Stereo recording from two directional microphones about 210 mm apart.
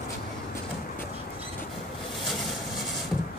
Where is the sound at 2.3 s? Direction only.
Centre (ahead or behind).